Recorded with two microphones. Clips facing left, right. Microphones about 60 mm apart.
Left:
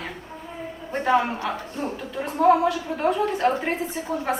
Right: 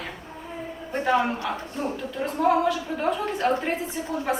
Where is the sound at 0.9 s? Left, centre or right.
Centre.